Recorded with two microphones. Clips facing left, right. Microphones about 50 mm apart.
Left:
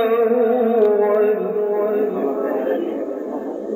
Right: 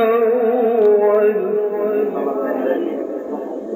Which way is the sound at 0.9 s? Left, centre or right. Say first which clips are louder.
Right 2 dB; centre.